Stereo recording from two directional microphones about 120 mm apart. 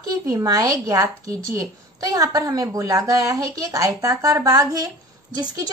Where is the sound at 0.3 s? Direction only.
30° right (ahead or behind).